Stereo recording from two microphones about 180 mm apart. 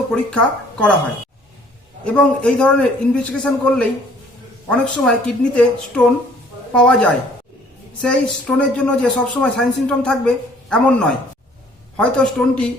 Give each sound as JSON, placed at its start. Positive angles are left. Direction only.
{"t": 0.1, "sound": "speech", "side_deg": 5}
{"t": 2.0, "sound": "speech", "side_deg": 5}